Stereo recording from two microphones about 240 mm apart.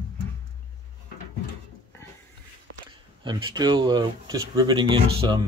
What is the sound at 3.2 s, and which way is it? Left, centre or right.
Speech, centre.